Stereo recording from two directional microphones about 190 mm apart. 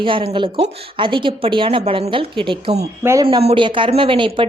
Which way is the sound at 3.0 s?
15° right (ahead or behind).